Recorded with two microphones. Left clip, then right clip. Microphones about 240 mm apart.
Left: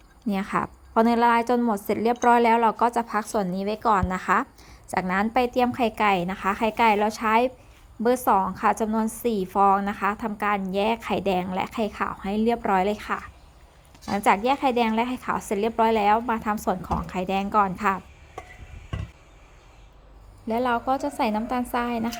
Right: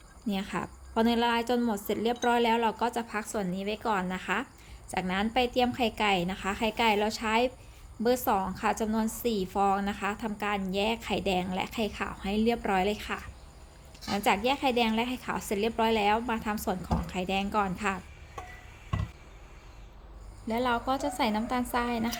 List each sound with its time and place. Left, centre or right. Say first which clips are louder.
0.3 s a woman's voice: left 8 dB; centre
20.5 s a woman's voice: left 5 dB; centre